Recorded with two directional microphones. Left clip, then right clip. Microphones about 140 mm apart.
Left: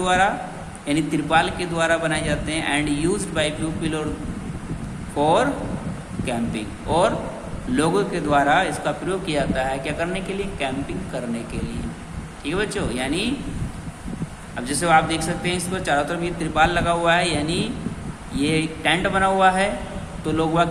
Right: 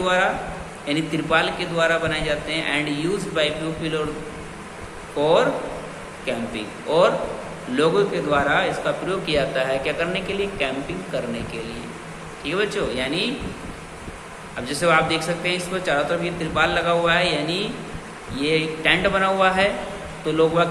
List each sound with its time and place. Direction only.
0.0 s a man's voice: 55° left (ahead or behind)
5.2 s a man's voice: 55° left (ahead or behind)
7.8 s speech: 60° left (ahead or behind); by 10.7 s 45° left (ahead or behind)
12.5 s a man's voice: 55° left (ahead or behind)
14.6 s speech: 55° left (ahead or behind)